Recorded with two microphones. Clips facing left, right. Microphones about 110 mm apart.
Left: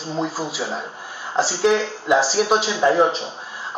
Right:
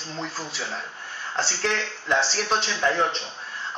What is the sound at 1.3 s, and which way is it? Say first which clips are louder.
A man's voice: left 9 dB; 5° left (ahead or behind).